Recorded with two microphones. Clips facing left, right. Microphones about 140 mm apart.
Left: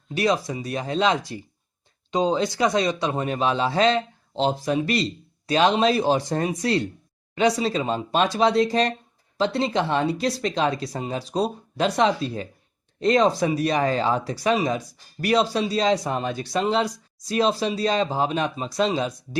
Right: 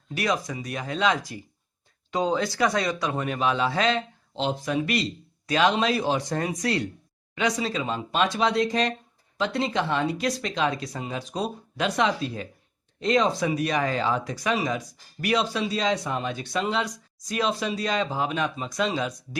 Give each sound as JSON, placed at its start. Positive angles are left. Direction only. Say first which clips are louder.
{"t": 0.1, "sound": "speech", "louder": "left 4 dB", "side_deg": 30}